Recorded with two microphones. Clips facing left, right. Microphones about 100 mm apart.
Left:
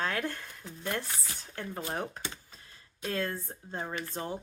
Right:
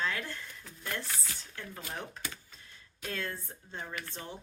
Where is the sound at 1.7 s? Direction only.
35° left (ahead or behind).